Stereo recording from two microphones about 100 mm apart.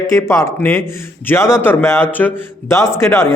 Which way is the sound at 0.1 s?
25° left (ahead or behind).